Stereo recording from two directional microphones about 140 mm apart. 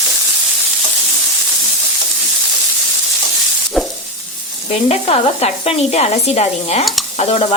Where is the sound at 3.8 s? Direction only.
5° right (ahead or behind).